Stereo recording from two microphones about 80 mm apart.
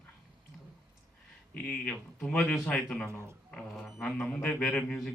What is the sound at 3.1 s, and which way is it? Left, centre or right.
Speech, right.